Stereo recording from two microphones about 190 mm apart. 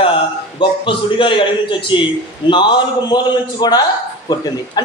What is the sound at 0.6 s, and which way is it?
A man's voice, 25° left (ahead or behind).